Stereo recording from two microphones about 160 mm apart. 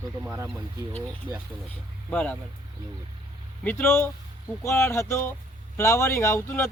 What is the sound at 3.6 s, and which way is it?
Speech, 15° left (ahead or behind).